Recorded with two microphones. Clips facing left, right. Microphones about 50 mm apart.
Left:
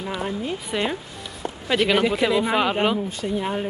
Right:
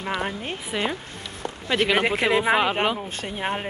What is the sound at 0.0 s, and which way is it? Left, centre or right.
Speech, right.